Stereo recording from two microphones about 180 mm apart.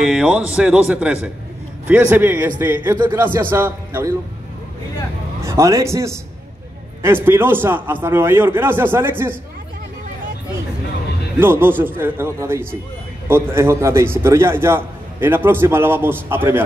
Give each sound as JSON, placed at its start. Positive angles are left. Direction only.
{"t": 0.0, "sound": "a man's voice", "side_deg": -5}
{"t": 5.4, "sound": "a man's voice", "side_deg": -15}
{"t": 11.3, "sound": "a man's voice", "side_deg": -10}